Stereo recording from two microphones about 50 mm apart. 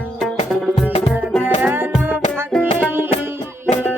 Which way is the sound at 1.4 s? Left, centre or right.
Right.